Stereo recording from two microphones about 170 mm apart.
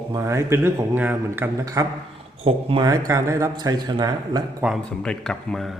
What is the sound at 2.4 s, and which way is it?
Speech, 35° right (ahead or behind).